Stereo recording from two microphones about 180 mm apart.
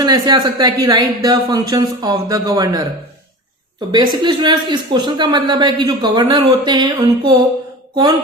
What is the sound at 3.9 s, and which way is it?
Speech, 25° right (ahead or behind).